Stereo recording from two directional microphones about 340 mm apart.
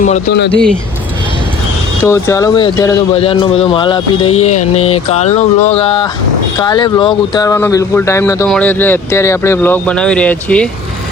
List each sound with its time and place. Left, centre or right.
0.0 s speech: left
2.0 s speech: centre